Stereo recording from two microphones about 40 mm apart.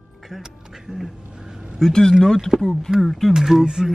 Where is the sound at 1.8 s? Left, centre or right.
Centre.